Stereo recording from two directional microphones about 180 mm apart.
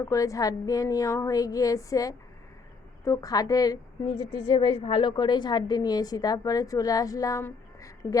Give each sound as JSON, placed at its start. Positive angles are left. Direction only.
{"t": 0.0, "sound": "a woman's voice", "side_deg": 20}